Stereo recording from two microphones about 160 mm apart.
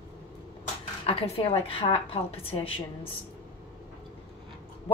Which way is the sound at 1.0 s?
35° left (ahead or behind).